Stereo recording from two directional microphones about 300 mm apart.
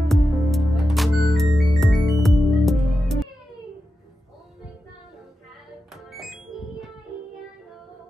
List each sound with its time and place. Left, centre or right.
0.1 s music: centre
6.1 s music: centre